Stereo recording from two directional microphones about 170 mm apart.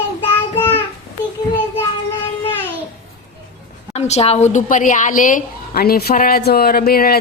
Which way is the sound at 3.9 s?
40° left (ahead or behind).